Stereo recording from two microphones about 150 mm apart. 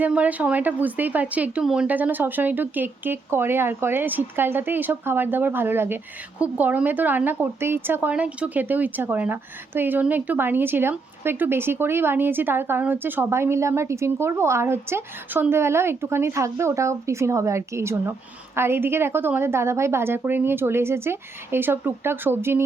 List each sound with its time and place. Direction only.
0.0 s speech: 10° right (ahead or behind)